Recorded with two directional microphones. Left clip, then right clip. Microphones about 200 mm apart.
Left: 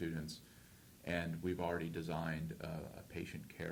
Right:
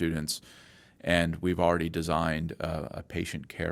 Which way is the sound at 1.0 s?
45° right (ahead or behind).